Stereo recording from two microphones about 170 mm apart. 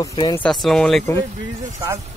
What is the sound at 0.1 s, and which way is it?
Speech, 25° left (ahead or behind).